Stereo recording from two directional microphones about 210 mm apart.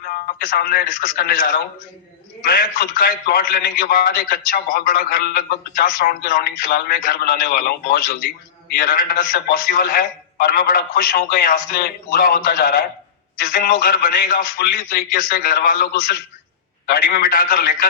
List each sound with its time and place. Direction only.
0.0 s a man's voice: 45° left (ahead or behind)